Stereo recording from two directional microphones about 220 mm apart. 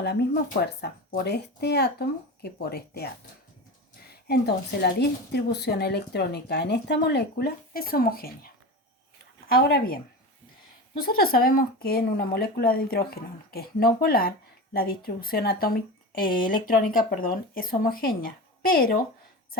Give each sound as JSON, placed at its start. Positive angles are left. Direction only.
{"t": 0.0, "sound": "speech", "side_deg": 50}
{"t": 4.1, "sound": "speech", "side_deg": 45}
{"t": 9.5, "sound": "a woman's voice", "side_deg": 45}